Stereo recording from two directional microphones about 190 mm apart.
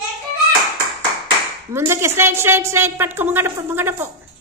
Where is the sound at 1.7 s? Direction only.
15° right (ahead or behind).